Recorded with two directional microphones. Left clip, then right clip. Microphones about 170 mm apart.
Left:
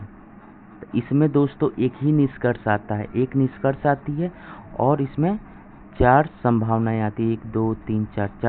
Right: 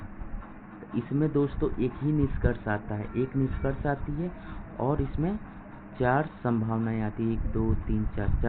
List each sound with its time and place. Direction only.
0.9 s speech: 70° left (ahead or behind)